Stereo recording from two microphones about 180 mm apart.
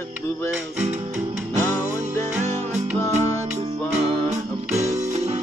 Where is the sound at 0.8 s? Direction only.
40° right (ahead or behind).